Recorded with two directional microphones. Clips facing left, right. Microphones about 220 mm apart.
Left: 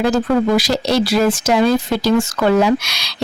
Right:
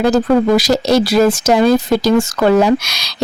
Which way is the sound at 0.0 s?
40° right (ahead or behind).